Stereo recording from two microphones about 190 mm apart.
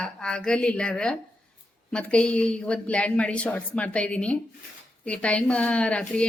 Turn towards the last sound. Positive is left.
turn(degrees=5)  # may be behind; listen again after turning